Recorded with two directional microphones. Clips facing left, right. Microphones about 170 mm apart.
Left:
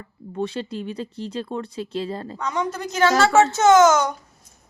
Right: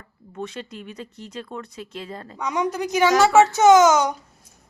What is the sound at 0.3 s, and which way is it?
Speech, 30° left (ahead or behind).